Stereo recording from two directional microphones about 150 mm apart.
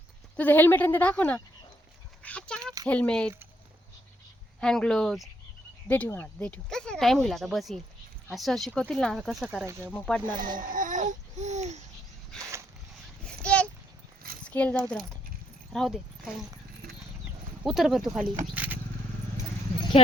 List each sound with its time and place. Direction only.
0.3 s speech: 10° left (ahead or behind)
2.2 s a sound: 10° left (ahead or behind)
2.8 s speech: 10° left (ahead or behind)
4.6 s speech: 5° left (ahead or behind)
5.9 s speech: 10° left (ahead or behind)
9.6 s speech: 15° right (ahead or behind)
9.9 s speech: 10° left (ahead or behind)
10.3 s a sound: 65° right (ahead or behind)
12.4 s a sound: 20° right (ahead or behind)
13.2 s a sound: 10° left (ahead or behind)
14.4 s speech: 10° left (ahead or behind)
17.6 s speech: centre (ahead or behind)
18.5 s vehicle: 10° right (ahead or behind)